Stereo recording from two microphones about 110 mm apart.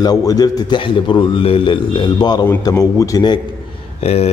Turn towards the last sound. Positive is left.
turn(degrees=65)  # may be behind; listen again after turning